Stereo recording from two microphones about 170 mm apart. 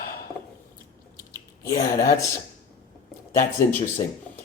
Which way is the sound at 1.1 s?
20° left (ahead or behind).